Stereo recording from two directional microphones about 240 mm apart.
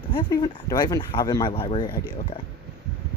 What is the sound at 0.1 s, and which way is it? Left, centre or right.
Speech, centre.